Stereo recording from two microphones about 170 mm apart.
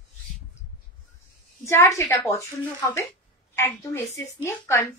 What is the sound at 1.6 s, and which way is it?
Speech, 15° left (ahead or behind).